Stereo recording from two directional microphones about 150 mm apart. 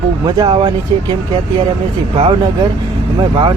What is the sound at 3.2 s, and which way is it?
Speech, 30° right (ahead or behind).